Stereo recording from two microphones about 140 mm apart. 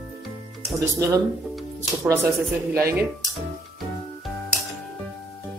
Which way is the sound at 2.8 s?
20° right (ahead or behind).